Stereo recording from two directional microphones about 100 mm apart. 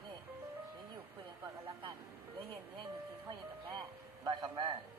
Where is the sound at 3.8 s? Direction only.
45° right (ahead or behind).